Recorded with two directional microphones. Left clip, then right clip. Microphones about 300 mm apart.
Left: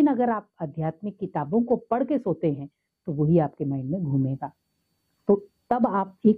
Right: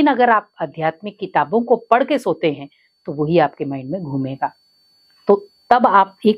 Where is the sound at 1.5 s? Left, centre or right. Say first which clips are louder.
Right 5 dB; right.